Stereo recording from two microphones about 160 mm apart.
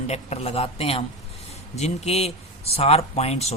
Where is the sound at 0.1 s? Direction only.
40° left (ahead or behind).